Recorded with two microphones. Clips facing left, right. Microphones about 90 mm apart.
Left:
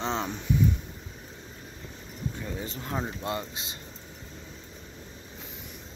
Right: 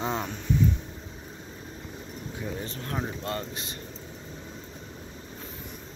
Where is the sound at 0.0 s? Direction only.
5° right (ahead or behind).